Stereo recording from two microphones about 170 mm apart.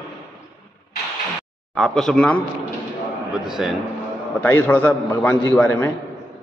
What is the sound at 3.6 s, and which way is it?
Speech, 5° right (ahead or behind).